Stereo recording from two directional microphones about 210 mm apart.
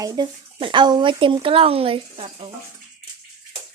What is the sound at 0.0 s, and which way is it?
Speech, 20° right (ahead or behind).